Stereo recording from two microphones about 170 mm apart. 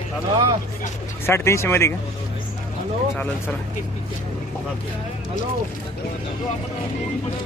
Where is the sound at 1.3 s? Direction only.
15° left (ahead or behind).